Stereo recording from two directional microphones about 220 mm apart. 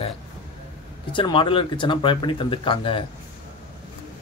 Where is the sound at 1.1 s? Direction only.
20° left (ahead or behind).